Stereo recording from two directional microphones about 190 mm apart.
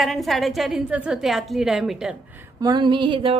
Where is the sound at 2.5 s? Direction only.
20° right (ahead or behind).